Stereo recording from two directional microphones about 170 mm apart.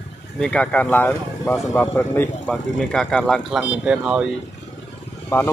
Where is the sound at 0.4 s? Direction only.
5° left (ahead or behind).